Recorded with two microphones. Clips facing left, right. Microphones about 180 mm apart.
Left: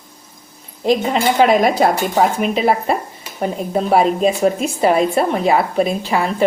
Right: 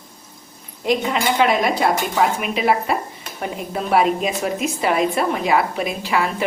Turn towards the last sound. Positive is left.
turn(degrees=30)  # may be behind; listen again after turning